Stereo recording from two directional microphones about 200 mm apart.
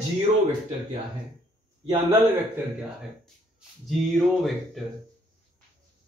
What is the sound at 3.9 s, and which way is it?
Speech, centre (ahead or behind).